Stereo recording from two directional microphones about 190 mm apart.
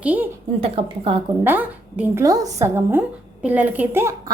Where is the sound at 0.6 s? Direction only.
30° right (ahead or behind).